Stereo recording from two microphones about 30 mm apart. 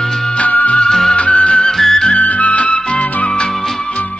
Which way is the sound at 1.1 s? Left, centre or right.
Left.